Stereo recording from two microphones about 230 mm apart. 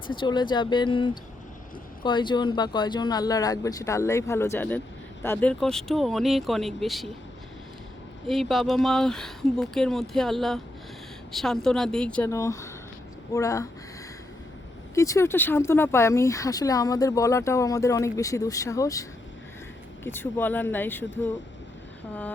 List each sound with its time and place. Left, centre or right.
0.1 s speech: centre
8.3 s speech: centre
14.9 s speech: centre
20.1 s speech: centre